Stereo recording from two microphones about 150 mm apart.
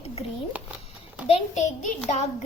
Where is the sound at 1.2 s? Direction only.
45° left (ahead or behind).